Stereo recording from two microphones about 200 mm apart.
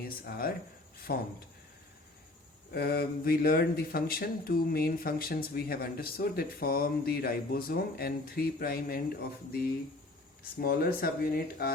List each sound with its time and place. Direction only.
0.0 s speech: 45° left (ahead or behind)
2.7 s speech: 50° left (ahead or behind)